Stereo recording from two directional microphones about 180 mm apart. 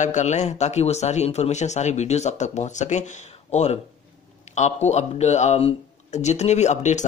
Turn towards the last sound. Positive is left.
turn(degrees=40)  # may be behind; listen again after turning